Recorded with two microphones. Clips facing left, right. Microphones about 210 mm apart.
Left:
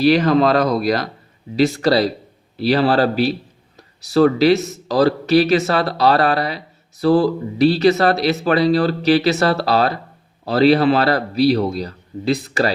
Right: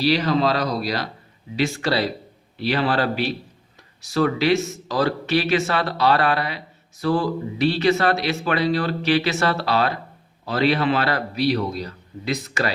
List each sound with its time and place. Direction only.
0.0 s speech: 50° left (ahead or behind); by 12.7 s 35° left (ahead or behind)